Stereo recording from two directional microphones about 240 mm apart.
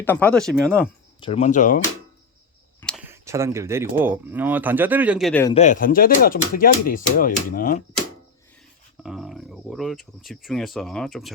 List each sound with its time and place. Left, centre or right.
0.0 s speech: centre
1.2 s speech: left
2.8 s speech: centre
5.5 s speech: left
9.0 s speech: centre